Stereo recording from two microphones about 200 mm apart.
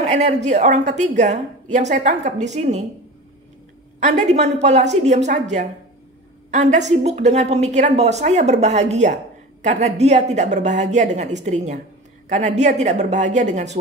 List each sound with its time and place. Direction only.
0.0 s a woman's voice: 35° right (ahead or behind)
4.0 s a woman's voice: 35° right (ahead or behind)